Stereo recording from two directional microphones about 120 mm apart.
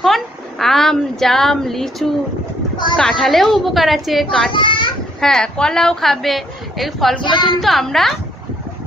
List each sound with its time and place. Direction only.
0.0 s a woman's voice: centre (ahead or behind)
4.5 s a child's voice: 40° left (ahead or behind)
5.2 s a woman's voice: 5° left (ahead or behind)
7.2 s speech: 40° left (ahead or behind)
7.6 s a woman's voice: centre (ahead or behind)